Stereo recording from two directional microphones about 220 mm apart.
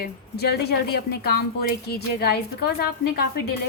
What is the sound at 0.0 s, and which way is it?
A woman's voice, 45° left (ahead or behind).